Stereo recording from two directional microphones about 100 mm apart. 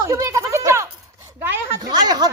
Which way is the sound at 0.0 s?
30° right (ahead or behind).